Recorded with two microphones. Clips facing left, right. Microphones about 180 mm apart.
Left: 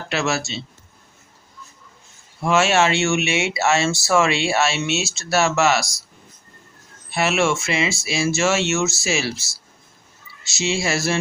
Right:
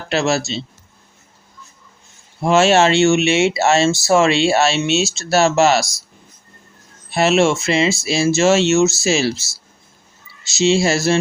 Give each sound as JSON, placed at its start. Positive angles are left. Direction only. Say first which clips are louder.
{"t": 0.1, "sound": "speech", "louder": "right 5 dB", "side_deg": -30}
{"t": 2.4, "sound": "speech", "louder": "right 5 dB", "side_deg": -30}
{"t": 7.1, "sound": "speech", "louder": "right 5 dB", "side_deg": -30}
{"t": 10.6, "sound": "speech", "louder": "right 7 dB", "side_deg": -30}